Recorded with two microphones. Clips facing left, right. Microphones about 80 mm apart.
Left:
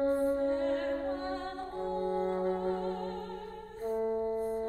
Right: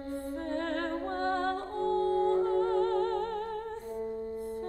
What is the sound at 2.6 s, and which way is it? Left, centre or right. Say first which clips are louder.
Music: right 6 dB; right.